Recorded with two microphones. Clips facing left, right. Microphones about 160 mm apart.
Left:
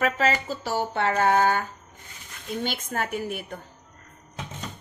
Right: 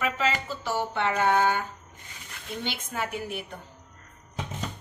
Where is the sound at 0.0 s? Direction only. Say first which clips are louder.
Left 4 dB; 40° left (ahead or behind).